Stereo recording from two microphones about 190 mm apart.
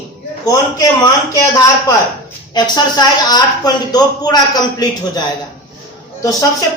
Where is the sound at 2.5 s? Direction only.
20° left (ahead or behind).